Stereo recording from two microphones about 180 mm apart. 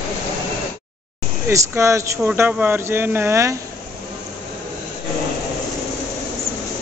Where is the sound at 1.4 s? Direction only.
15° right (ahead or behind).